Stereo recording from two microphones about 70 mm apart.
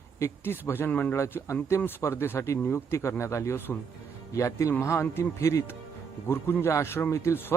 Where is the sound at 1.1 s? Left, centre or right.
Left.